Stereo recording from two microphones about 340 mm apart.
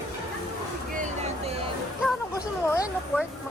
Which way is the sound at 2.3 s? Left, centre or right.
Centre.